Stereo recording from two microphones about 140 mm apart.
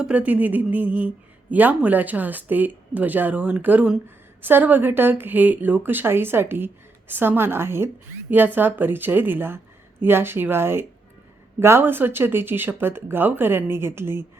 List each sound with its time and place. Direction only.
0.0 s speech: 10° right (ahead or behind)